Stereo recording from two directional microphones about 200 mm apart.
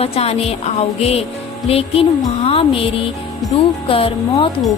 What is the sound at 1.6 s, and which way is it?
Music, 30° left (ahead or behind).